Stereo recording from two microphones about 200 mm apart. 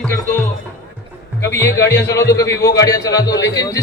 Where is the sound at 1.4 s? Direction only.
15° left (ahead or behind).